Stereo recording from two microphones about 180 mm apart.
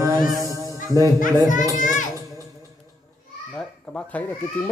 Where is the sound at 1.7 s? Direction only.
45° left (ahead or behind).